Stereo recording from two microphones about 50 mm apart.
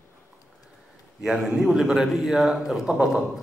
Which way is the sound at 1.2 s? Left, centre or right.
Centre.